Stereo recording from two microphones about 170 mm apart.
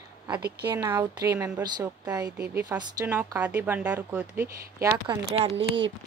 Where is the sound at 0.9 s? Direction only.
15° right (ahead or behind).